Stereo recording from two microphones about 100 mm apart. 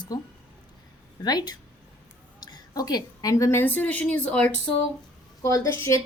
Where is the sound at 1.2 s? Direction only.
45° left (ahead or behind).